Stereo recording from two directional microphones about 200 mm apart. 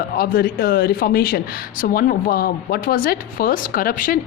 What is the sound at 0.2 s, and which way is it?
Speech, 45° left (ahead or behind).